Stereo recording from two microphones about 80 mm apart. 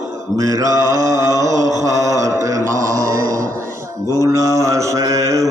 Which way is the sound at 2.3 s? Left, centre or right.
Right.